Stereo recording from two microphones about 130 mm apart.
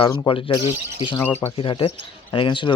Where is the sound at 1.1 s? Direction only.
15° left (ahead or behind).